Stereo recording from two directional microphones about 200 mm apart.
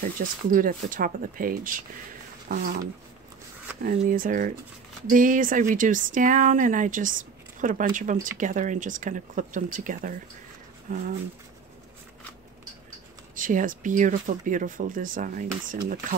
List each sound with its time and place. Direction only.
0.2 s speech: 45° right (ahead or behind)
3.8 s speech: 45° right (ahead or behind)
13.3 s speech: 40° right (ahead or behind)